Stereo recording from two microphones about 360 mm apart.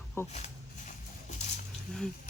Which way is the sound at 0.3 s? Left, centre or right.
Centre.